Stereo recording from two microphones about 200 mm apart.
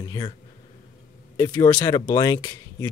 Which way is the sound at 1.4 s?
20° left (ahead or behind).